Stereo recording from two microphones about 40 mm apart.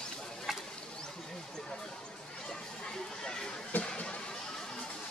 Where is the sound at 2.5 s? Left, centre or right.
Centre.